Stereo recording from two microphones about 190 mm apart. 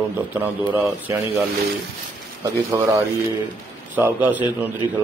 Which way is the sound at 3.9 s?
10° right (ahead or behind).